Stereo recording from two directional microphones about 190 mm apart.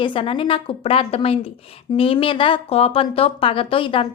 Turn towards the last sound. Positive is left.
turn(degrees=30)  # may be behind; listen again after turning